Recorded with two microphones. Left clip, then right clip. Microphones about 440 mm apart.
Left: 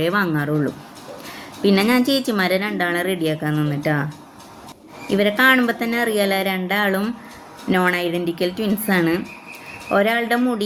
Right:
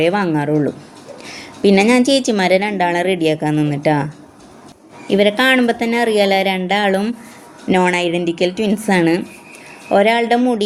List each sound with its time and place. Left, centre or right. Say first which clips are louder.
0.0 s a woman's voice: right 4 dB; left
5.0 s a woman's voice: right 2 dB; left